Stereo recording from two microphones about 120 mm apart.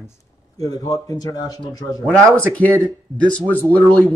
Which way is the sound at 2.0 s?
10° left (ahead or behind).